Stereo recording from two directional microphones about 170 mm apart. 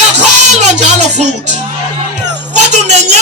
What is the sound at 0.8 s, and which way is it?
Music, 45° right (ahead or behind).